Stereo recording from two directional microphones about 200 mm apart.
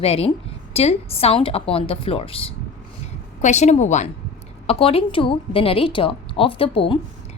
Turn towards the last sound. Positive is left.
turn(degrees=30)  # may be behind; listen again after turning